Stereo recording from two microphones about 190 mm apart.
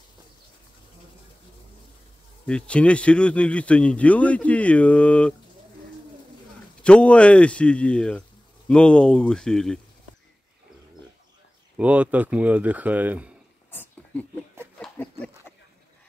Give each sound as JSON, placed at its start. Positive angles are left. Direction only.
{"t": 2.4, "sound": "speech", "side_deg": 5}
{"t": 6.8, "sound": "speech", "side_deg": 5}
{"t": 11.7, "sound": "speech", "side_deg": -5}
{"t": 13.7, "sound": "a sound", "side_deg": 10}